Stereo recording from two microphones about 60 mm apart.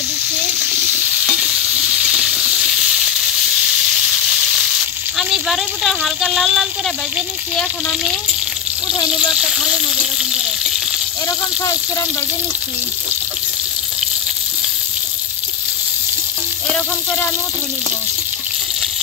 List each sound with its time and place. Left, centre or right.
0.7 s stir: right
1.3 s frying: centre
9.3 s speech: centre
11.2 s speech: left